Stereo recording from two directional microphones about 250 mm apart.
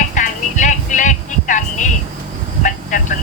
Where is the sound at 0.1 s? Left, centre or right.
Left.